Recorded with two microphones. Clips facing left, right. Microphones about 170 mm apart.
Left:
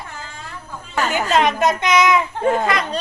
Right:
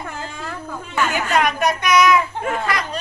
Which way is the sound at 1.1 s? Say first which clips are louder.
Left 4 dB; 25° left (ahead or behind).